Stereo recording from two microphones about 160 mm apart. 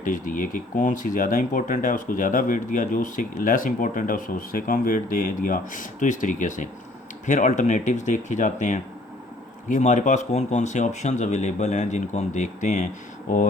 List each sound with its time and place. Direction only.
0.0 s speech: 55° left (ahead or behind)